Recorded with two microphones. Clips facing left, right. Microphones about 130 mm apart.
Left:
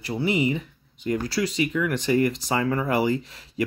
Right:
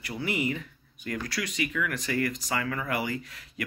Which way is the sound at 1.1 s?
30° left (ahead or behind).